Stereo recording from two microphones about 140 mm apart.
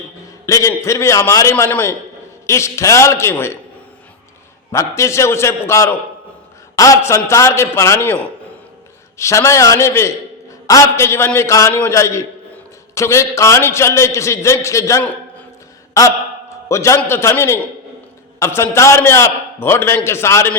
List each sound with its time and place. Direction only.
0.4 s a man's voice: 25° left (ahead or behind)
4.7 s a man's voice: 20° left (ahead or behind)